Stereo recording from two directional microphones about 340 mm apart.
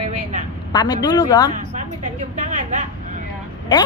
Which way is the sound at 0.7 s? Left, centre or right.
Centre.